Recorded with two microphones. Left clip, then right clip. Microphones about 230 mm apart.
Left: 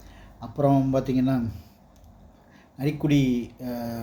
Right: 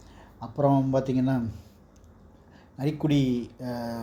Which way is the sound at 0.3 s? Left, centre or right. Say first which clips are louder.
Left 1 dB; centre.